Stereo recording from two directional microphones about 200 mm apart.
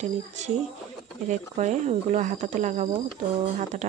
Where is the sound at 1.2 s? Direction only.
35° right (ahead or behind).